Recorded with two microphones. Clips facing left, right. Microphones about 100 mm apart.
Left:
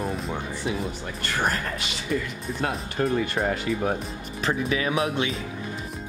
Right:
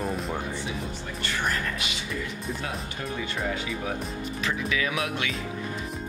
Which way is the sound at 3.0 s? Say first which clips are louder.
Left 10 dB; 45° left (ahead or behind).